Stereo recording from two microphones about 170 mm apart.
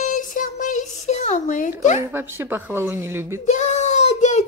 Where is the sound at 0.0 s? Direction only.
50° left (ahead or behind).